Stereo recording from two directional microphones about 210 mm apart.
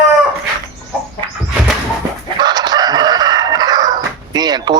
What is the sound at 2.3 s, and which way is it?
Chicken, 20° right (ahead or behind).